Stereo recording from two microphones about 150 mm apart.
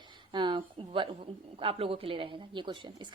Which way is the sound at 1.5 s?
40° right (ahead or behind).